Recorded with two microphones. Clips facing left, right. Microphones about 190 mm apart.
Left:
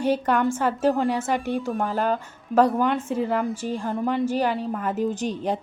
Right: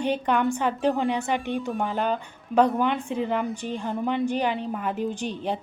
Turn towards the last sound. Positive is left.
turn(degrees=40)  # may be behind; listen again after turning